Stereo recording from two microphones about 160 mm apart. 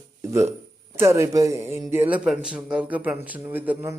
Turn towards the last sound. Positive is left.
turn(degrees=-10)  # may be behind; listen again after turning